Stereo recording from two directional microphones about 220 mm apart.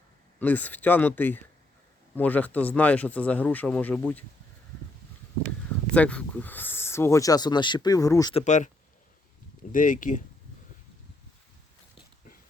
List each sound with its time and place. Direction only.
0.3 s speech: 10° left (ahead or behind)
5.5 s speech: 5° left (ahead or behind)
8.4 s speech: 35° left (ahead or behind)
9.7 s speech: 35° left (ahead or behind)